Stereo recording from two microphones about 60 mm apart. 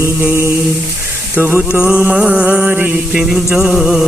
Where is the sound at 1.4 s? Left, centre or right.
Right.